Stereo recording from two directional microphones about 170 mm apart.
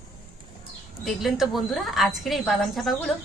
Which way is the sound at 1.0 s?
Centre (ahead or behind).